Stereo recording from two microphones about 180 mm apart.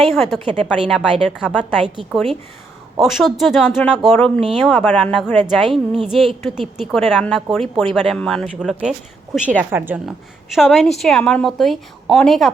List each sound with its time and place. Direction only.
0.1 s a woman's voice: centre (ahead or behind)